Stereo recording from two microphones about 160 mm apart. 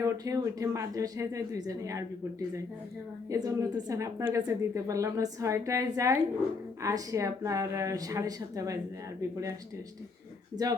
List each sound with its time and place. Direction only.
0.0 s a woman's voice: 20° right (ahead or behind)
3.2 s a woman's voice: 20° right (ahead or behind)
10.6 s a woman's voice: 25° right (ahead or behind)